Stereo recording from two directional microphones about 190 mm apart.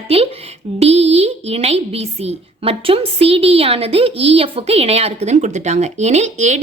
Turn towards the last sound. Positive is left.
turn(degrees=-35)  # may be behind; listen again after turning